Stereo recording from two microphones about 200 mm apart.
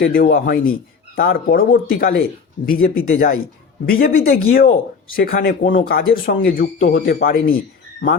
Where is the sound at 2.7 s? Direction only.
90° left.